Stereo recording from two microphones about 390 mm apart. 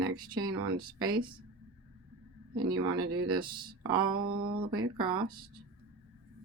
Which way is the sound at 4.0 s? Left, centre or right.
Right.